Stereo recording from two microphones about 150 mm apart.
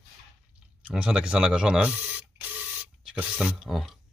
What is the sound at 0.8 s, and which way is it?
Speech, 5° right (ahead or behind).